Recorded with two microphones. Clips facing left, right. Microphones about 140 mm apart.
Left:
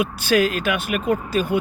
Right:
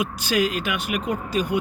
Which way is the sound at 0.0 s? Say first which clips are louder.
Left 4 dB; 15° right (ahead or behind).